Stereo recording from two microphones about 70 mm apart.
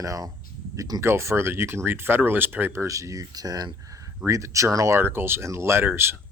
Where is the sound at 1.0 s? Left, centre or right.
Right.